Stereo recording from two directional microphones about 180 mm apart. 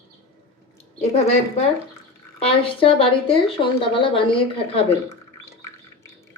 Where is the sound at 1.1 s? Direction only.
35° left (ahead or behind).